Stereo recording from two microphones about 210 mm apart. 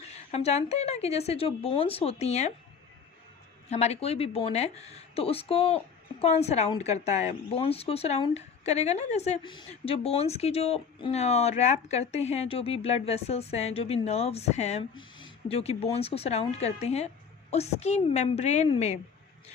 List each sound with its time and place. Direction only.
0.0 s a woman's voice: 30° left (ahead or behind)
3.7 s a woman's voice: 30° left (ahead or behind)